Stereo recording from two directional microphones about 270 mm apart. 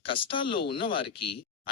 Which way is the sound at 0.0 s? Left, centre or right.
Centre.